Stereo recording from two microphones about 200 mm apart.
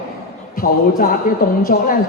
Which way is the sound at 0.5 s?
45° left (ahead or behind).